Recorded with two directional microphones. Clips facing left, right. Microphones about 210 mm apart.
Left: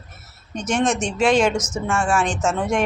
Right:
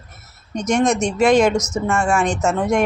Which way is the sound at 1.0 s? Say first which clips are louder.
Right 4 dB; 10° right (ahead or behind).